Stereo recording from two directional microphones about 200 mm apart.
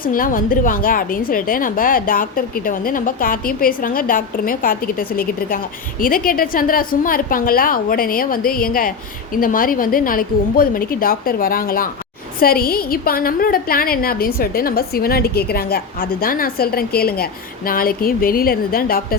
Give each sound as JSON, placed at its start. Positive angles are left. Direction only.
{"t": 0.0, "sound": "a woman's voice", "side_deg": 45}